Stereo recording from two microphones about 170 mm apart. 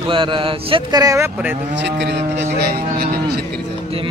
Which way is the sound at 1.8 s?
90° right.